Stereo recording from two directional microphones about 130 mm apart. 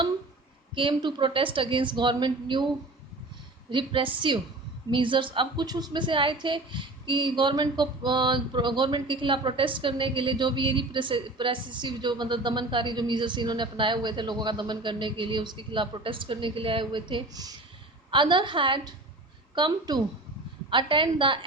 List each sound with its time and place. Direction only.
0.8 s female singing: 40° right (ahead or behind)
3.7 s female singing: 40° right (ahead or behind)